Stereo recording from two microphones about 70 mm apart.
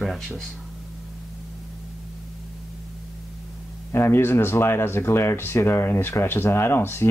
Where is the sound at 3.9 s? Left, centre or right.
Left.